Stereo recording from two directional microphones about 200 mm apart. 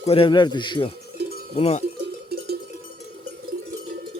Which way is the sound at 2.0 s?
50° right (ahead or behind).